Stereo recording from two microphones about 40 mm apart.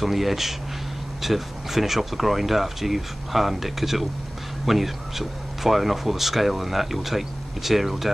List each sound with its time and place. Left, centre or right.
0.0 s speech: centre